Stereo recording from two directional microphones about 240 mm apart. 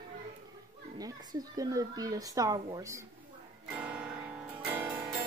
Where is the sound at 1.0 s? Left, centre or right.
Centre.